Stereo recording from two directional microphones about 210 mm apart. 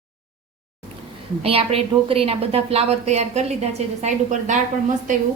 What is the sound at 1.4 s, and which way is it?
A woman's voice, 25° right (ahead or behind).